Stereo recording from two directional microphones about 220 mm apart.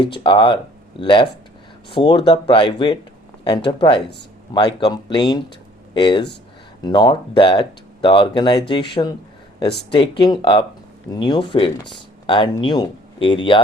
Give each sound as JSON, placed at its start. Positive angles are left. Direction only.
{"t": 0.0, "sound": "speech", "side_deg": 20}